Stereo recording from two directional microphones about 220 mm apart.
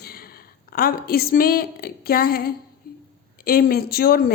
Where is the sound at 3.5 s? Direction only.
40° left (ahead or behind).